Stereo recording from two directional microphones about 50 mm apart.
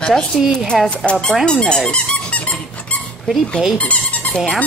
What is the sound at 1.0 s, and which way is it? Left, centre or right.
A woman's voice, left.